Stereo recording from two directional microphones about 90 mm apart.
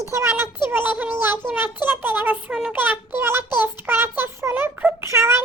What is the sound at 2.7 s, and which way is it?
Child singing, 20° right (ahead or behind).